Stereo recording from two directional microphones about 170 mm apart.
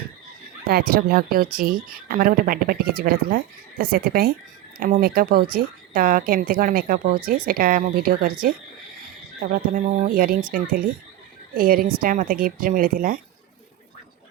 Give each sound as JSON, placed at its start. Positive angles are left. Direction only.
{"t": 0.7, "sound": "speech", "side_deg": -65}